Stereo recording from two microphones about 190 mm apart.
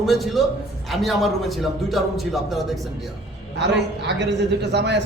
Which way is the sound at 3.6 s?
65° right (ahead or behind).